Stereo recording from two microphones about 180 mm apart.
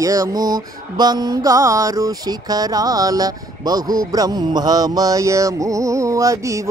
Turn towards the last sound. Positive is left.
turn(degrees=-15)  # may be behind; listen again after turning